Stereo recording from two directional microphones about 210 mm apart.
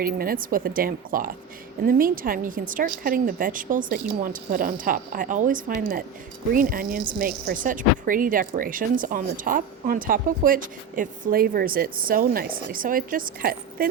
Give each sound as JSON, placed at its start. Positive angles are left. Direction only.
{"t": 0.0, "sound": "a woman's voice", "side_deg": -45}